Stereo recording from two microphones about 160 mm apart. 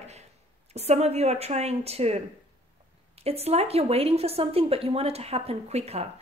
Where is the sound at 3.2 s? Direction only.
40° right (ahead or behind).